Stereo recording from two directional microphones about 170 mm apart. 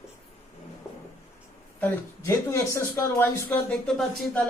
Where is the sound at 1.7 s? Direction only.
15° left (ahead or behind).